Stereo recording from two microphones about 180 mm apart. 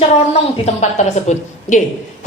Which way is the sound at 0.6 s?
40° left (ahead or behind).